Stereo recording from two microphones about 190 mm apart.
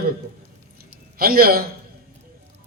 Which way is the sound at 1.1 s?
50° right (ahead or behind).